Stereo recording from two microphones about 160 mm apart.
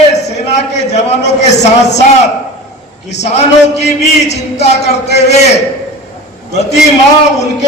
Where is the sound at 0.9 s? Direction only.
40° left (ahead or behind).